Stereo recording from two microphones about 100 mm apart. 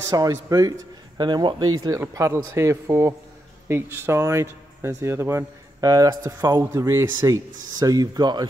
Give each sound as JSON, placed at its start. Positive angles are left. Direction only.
{"t": 0.1, "sound": "speech", "side_deg": -35}
{"t": 2.0, "sound": "speech", "side_deg": -30}
{"t": 5.8, "sound": "speech", "side_deg": -40}